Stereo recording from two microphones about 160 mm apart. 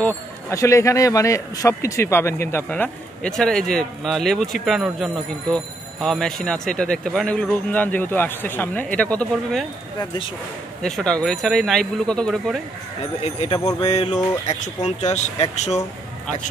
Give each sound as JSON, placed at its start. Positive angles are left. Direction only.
{"t": 0.0, "sound": "speech", "side_deg": 20}
{"t": 10.8, "sound": "speech", "side_deg": 5}
{"t": 13.2, "sound": "speech", "side_deg": 40}
{"t": 13.7, "sound": "music", "side_deg": 25}
{"t": 14.5, "sound": "speech", "side_deg": 45}